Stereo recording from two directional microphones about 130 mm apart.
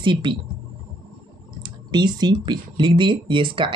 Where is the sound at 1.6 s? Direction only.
35° right (ahead or behind).